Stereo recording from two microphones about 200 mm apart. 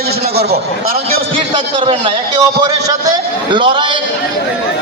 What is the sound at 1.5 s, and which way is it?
A man's voice, 25° right (ahead or behind).